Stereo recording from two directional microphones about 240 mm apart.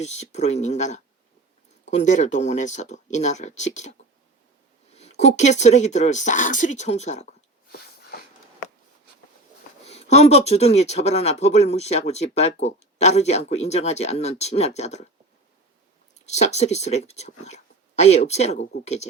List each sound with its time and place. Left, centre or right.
0.0 s speech: left
4.9 s speech: left
9.8 s speech: left
16.2 s speech: left